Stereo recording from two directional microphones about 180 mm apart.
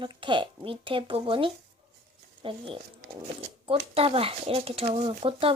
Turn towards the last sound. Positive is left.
turn(degrees=-30)  # may be behind; listen again after turning